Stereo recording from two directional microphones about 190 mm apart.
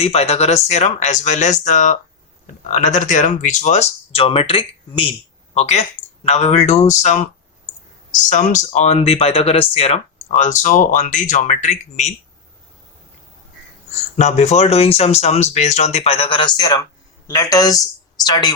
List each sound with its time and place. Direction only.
0.0 s speech: 35° left (ahead or behind)
14.2 s speech: 40° left (ahead or behind); by 18.5 s 20° left (ahead or behind)